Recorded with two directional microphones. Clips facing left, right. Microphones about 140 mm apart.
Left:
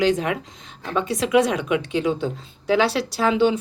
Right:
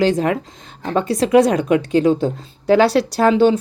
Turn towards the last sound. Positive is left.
turn(degrees=-45)  # may be behind; listen again after turning